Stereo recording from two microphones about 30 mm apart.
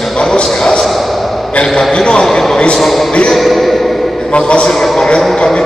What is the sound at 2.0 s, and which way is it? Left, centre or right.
Speech, left.